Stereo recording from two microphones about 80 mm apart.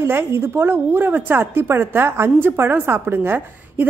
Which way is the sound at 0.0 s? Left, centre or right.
Right.